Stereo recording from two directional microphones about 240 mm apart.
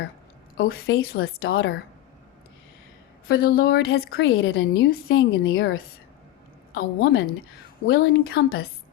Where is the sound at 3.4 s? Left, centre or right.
Left.